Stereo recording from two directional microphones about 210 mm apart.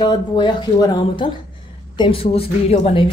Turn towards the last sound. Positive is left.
turn(degrees=30)  # may be behind; listen again after turning